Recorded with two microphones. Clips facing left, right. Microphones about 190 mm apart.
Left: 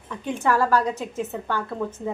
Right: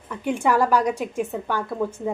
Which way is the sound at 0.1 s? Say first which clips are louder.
Right 2 dB; 10° right (ahead or behind).